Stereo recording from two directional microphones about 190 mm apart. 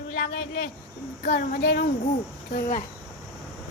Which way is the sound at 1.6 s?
65° left (ahead or behind).